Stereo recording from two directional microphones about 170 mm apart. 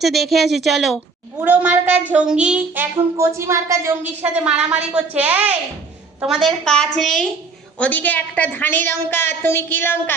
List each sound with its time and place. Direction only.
0.0 s a woman's voice: centre (ahead or behind)
1.4 s child singing: 10° right (ahead or behind)
6.2 s a woman's voice: centre (ahead or behind)
7.8 s a sound: 10° left (ahead or behind)